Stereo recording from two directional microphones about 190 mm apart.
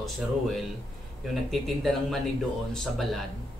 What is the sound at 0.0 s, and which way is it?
Speech, centre (ahead or behind).